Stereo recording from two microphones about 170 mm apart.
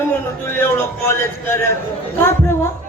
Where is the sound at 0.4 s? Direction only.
15° left (ahead or behind).